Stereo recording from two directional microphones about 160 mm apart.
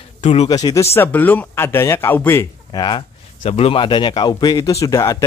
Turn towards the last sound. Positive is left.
turn(degrees=20)  # may be behind; listen again after turning